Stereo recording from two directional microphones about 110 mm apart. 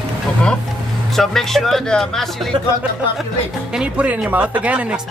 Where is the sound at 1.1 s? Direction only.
Centre (ahead or behind).